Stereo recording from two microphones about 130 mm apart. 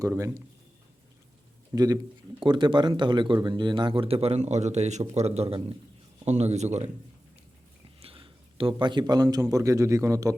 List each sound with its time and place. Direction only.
0.0 s a man's voice: 25° right (ahead or behind)
1.7 s a man's voice: 30° right (ahead or behind)
2.4 s a man's voice: 40° right (ahead or behind); by 6.9 s 60° right (ahead or behind)
8.0 s a man's voice: 45° right (ahead or behind); by 10.3 s 25° right (ahead or behind)